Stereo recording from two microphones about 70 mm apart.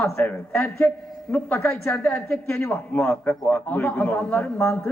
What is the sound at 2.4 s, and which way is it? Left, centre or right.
A man's voice, left.